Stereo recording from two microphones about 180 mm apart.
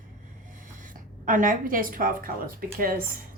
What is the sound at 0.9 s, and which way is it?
A woman's voice, 50° right (ahead or behind).